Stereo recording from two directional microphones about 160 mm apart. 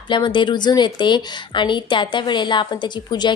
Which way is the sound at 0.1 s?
30° left (ahead or behind).